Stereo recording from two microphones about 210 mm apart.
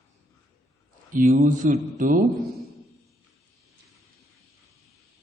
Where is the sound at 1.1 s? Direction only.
40° right (ahead or behind).